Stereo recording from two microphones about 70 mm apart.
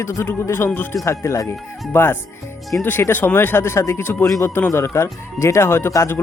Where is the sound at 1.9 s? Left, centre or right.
Left.